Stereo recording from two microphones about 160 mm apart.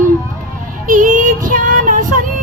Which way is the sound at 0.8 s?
55° right (ahead or behind).